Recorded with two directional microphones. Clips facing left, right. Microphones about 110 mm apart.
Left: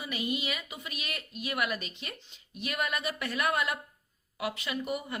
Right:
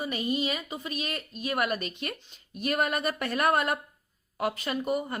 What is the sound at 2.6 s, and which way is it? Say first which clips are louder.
Speech: right 6 dB; 45° right (ahead or behind).